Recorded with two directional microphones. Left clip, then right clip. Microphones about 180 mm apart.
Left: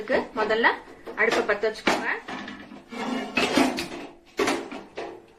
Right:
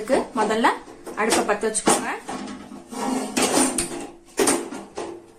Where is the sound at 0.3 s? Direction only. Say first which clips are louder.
Even; 45° right (ahead or behind).